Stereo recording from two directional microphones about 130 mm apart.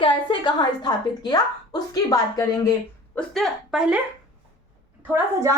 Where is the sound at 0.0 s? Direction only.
40° left (ahead or behind).